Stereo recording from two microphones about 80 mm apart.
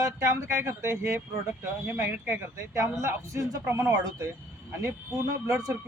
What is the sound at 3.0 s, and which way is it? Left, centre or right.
Speech, right.